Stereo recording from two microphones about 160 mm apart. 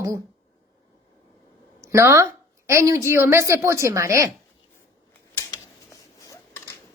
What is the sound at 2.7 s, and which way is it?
A woman's voice, 20° right (ahead or behind).